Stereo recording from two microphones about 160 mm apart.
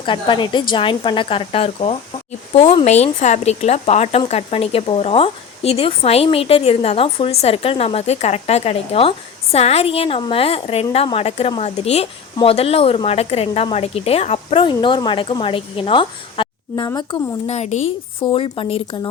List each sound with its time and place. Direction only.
0.0 s a woman's voice: 30° left (ahead or behind)
17.4 s a woman's voice: 45° left (ahead or behind)